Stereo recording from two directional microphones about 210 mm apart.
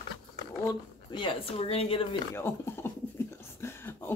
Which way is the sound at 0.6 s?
20° left (ahead or behind).